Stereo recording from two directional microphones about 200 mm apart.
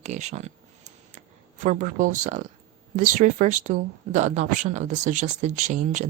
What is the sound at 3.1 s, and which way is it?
Speech, 40° right (ahead or behind).